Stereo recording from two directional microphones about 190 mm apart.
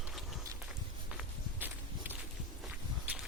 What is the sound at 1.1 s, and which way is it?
Walk, 10° right (ahead or behind).